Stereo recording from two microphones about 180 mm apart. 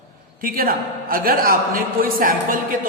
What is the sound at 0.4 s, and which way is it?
A man's voice, 55° right (ahead or behind).